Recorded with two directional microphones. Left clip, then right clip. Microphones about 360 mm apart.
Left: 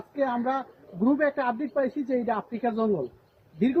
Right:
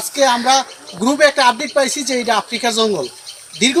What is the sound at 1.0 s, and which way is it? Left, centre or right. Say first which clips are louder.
Speech: right 12 dB; centre.